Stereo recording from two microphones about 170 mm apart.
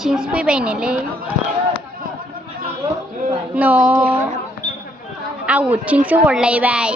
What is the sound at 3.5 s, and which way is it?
Speech, 10° right (ahead or behind).